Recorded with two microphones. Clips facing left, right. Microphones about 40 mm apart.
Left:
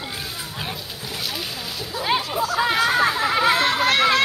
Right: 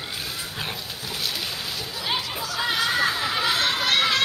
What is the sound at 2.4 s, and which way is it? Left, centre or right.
Chatter, left.